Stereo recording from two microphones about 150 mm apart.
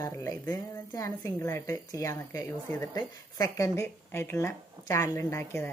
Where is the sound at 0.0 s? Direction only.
20° left (ahead or behind).